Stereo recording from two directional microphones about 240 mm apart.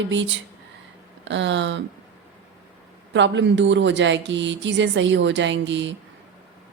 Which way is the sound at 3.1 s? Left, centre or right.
Right.